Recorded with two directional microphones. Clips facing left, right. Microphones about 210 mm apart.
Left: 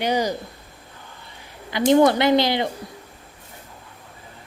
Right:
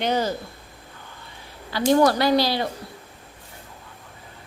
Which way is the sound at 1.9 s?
20° left (ahead or behind).